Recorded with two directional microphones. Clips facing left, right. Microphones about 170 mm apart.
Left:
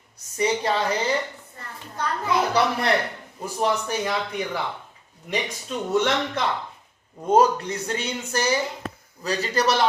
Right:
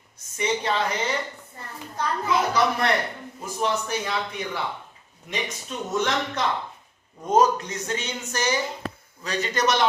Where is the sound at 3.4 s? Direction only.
35° left (ahead or behind).